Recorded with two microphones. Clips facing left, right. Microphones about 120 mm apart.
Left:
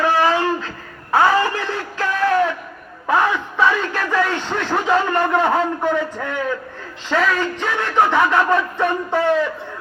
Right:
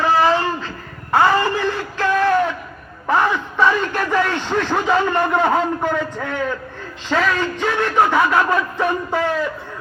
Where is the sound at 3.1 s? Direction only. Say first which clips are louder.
Even; centre (ahead or behind).